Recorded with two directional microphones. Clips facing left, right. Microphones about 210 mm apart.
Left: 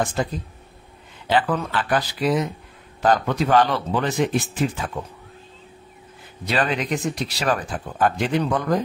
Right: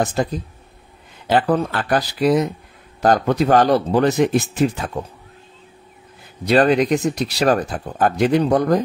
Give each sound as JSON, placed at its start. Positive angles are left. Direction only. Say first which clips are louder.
{"t": 0.0, "sound": "speech", "louder": "right 4 dB", "side_deg": -40}
{"t": 6.4, "sound": "speech", "louder": "right 9 dB", "side_deg": -40}